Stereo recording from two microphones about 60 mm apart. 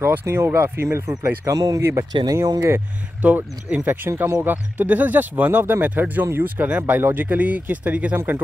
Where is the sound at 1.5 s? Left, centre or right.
Right.